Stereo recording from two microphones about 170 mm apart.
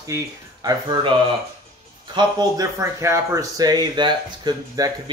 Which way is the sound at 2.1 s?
25° right (ahead or behind).